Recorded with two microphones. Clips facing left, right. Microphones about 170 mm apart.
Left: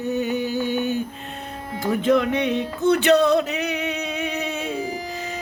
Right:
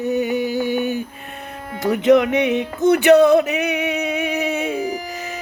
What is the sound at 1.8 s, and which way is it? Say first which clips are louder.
Music: right 5 dB; 75° right (ahead or behind).